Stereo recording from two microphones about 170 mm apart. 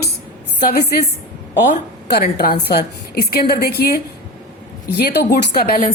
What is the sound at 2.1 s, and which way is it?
A woman's voice, 65° left (ahead or behind).